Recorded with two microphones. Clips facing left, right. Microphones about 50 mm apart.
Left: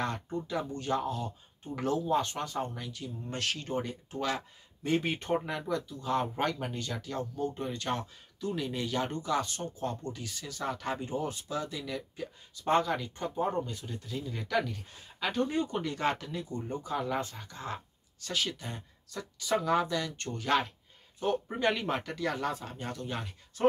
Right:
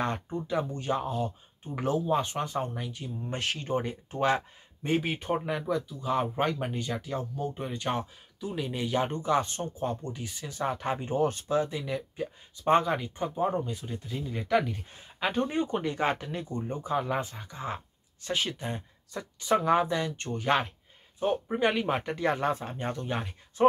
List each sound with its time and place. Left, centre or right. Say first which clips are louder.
0.0 s speech: right 3 dB; right
4.4 s speech: right 2 dB; right
5.0 s speech: right 1 dB; centre; by 11.1 s right
11.1 s speech: right 7 dB; right
11.5 s speech: right 7 dB; right
16.3 s speech: right 2 dB; right; by 22.0 s centre
22.0 s speech: right 5 dB; right